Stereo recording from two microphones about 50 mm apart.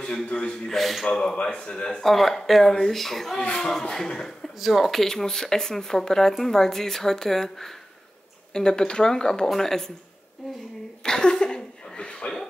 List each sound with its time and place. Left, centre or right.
0.0 s speech: left
0.7 s speech: centre
1.0 s speech: centre
2.0 s speech: centre
3.4 s speech: centre
4.6 s speech: centre
11.0 s sneeze: centre